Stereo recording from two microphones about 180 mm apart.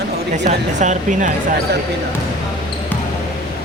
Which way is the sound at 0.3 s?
40° right (ahead or behind).